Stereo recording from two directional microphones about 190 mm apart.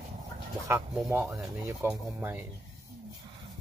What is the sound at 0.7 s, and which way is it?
Speech, 15° right (ahead or behind).